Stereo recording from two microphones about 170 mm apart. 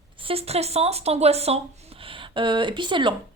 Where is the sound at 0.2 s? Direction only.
35° right (ahead or behind).